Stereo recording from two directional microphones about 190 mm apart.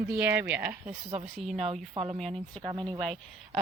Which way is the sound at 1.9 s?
30° right (ahead or behind).